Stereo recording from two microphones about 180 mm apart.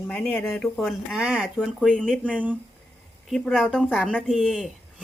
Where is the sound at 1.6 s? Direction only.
5° left (ahead or behind).